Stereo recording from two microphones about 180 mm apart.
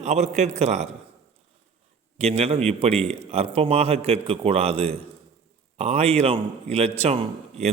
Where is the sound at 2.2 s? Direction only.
35° right (ahead or behind).